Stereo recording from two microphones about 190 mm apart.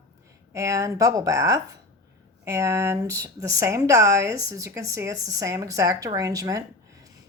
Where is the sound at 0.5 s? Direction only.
15° right (ahead or behind).